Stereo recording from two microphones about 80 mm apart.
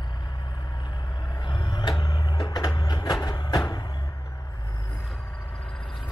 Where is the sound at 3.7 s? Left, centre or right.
Left.